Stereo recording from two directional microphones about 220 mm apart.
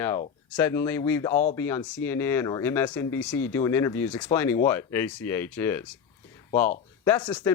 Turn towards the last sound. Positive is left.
turn(degrees=20)  # may be behind; listen again after turning